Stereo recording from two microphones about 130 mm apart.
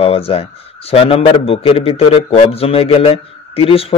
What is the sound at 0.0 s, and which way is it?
A man's voice, 50° left (ahead or behind).